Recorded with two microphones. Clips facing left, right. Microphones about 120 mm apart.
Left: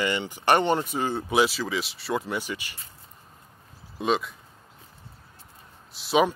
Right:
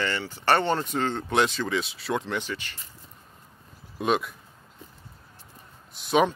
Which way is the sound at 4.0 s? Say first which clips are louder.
Even; centre (ahead or behind).